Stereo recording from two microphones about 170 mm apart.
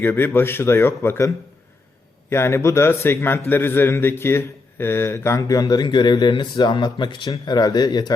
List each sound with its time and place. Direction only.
0.0 s a man's voice: 10° left (ahead or behind)
2.3 s a man's voice: 15° left (ahead or behind)